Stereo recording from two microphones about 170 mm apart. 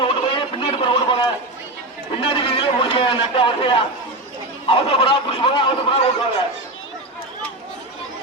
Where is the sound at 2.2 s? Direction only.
30° left (ahead or behind).